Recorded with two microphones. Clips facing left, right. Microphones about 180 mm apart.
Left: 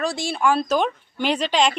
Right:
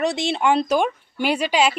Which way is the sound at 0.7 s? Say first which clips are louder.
Right 1 dB; 10° right (ahead or behind).